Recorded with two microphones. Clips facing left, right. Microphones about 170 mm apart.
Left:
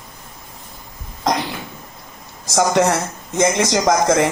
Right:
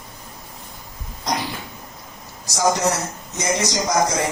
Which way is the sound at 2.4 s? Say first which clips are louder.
Left 4 dB; 60° left (ahead or behind).